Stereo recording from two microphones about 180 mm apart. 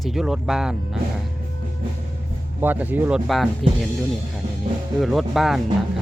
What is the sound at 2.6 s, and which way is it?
Speech, 10° right (ahead or behind).